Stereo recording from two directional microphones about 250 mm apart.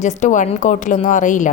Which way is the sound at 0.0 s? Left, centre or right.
Left.